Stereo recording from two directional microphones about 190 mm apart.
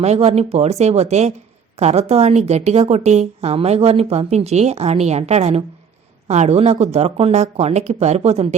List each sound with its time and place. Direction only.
0.0 s a woman's voice: 35° right (ahead or behind)